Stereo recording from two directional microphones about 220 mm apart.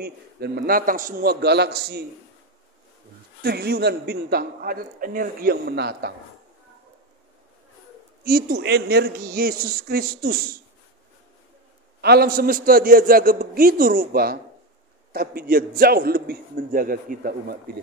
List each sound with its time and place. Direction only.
0.0 s a man's voice: 45° right (ahead or behind)
3.4 s a man's voice: 45° right (ahead or behind)
8.2 s a man's voice: 40° right (ahead or behind)
12.0 s a man's voice: 45° right (ahead or behind)